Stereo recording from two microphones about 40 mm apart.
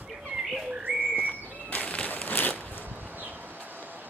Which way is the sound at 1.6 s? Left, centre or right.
Left.